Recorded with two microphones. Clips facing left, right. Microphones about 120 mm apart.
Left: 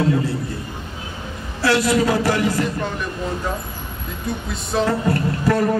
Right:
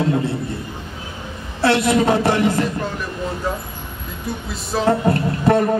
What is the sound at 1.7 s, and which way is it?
Speech, 55° right (ahead or behind).